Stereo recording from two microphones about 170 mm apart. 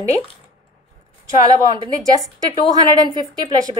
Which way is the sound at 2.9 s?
25° right (ahead or behind).